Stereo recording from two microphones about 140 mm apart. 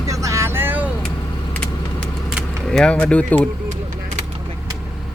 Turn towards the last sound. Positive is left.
turn(degrees=10)  # may be behind; listen again after turning